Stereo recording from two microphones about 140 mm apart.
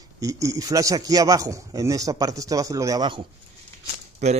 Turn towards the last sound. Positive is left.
turn(degrees=-55)  # may be behind; listen again after turning